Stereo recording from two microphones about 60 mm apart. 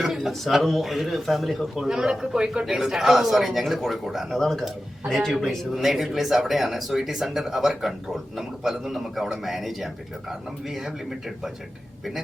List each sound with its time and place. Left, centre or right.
0.0 s speech: centre